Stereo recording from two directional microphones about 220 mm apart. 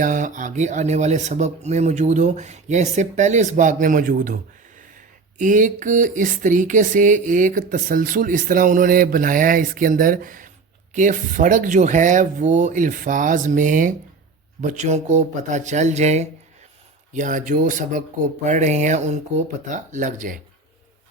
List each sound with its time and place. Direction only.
0.0 s speech: 35° right (ahead or behind)